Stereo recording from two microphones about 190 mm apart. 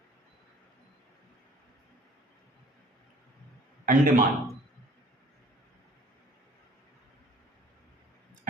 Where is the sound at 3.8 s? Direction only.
45° right (ahead or behind).